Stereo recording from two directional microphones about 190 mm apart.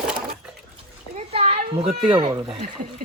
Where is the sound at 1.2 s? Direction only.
35° right (ahead or behind).